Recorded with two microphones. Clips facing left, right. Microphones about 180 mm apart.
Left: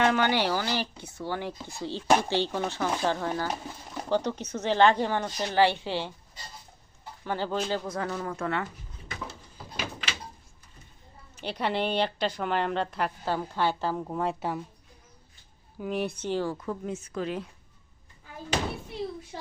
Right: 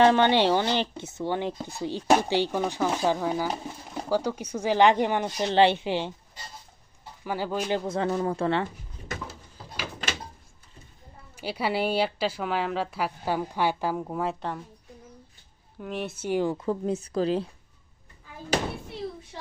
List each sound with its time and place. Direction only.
0.0 s speech: 30° right (ahead or behind)
7.3 s speech: 10° right (ahead or behind)
7.9 s speech: 25° right (ahead or behind)
11.3 s speech: 10° right (ahead or behind)
15.8 s speech: centre (ahead or behind); by 17.5 s 30° right (ahead or behind)